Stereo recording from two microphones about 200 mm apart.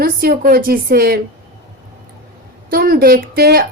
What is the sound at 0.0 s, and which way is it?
Speech, 50° right (ahead or behind).